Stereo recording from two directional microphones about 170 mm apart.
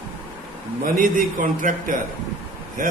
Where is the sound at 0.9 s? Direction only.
55° right (ahead or behind).